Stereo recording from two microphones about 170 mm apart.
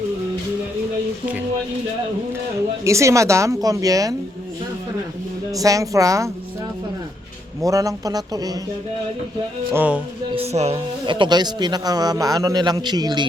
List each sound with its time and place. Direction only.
2.8 s speech: 15° right (ahead or behind)
5.5 s speech: 20° right (ahead or behind)
7.6 s speech: 20° right (ahead or behind)
9.7 s speech: 10° right (ahead or behind)
10.3 s speech: 40° right (ahead or behind)
11.0 s speech: 30° right (ahead or behind)